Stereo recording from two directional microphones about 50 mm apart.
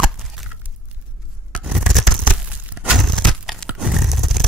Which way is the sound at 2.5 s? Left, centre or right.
Right.